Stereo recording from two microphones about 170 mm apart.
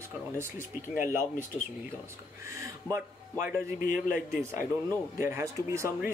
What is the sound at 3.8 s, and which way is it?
Speech, 55° left (ahead or behind).